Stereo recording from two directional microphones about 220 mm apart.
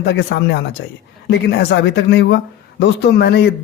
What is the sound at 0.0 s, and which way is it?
Speech, 50° left (ahead or behind).